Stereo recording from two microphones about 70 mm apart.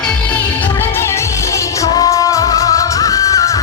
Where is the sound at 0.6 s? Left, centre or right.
Left.